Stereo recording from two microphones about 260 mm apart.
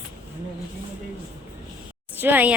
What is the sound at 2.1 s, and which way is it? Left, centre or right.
Speech, centre.